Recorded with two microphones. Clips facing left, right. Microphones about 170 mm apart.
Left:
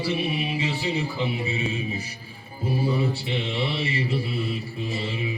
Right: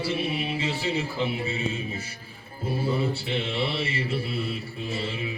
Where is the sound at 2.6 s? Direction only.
5° right (ahead or behind).